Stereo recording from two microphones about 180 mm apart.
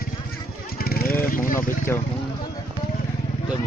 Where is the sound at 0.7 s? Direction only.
55° left (ahead or behind).